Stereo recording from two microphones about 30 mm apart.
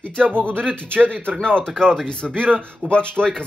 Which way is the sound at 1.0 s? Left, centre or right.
Right.